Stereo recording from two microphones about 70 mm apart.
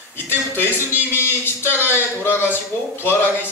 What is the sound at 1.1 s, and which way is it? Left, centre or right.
A man's voice, left.